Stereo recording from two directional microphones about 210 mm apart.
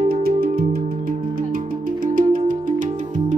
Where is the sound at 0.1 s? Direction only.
45° right (ahead or behind).